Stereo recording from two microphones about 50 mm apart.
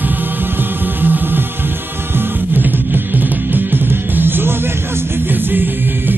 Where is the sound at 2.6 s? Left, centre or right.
Right.